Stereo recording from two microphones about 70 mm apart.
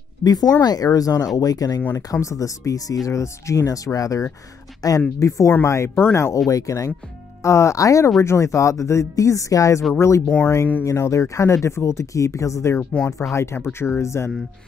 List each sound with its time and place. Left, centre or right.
0.2 s speech: left
2.1 s speech: left
5.5 s speech: left
12.9 s speech: centre
13.3 s speech: left